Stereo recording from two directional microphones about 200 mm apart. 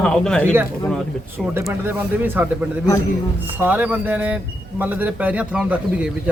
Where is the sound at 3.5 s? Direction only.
10° right (ahead or behind).